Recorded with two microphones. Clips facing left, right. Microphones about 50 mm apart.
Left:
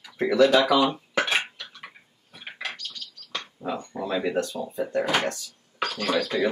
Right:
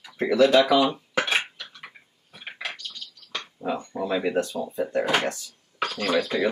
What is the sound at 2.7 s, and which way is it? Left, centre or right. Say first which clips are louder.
Bird: even; right.